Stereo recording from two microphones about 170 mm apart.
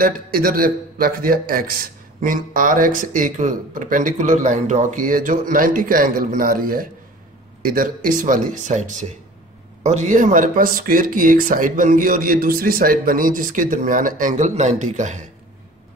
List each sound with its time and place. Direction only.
0.0 s a man's voice: 55° right (ahead or behind)